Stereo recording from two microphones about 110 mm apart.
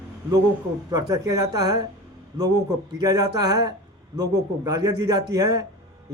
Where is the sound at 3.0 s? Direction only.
35° right (ahead or behind).